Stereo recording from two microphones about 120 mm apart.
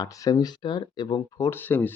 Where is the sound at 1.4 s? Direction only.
15° left (ahead or behind).